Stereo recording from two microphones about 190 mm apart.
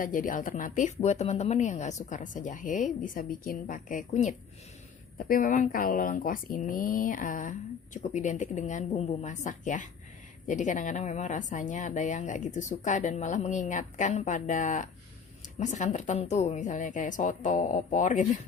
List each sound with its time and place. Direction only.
0.0 s a woman's voice: 45° left (ahead or behind)